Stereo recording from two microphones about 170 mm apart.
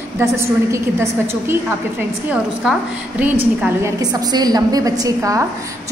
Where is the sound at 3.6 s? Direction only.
20° right (ahead or behind).